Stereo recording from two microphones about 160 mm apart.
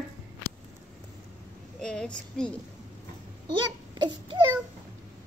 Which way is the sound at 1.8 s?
5° left (ahead or behind).